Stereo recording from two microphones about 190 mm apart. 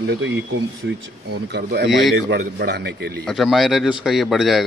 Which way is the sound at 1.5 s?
60° right (ahead or behind).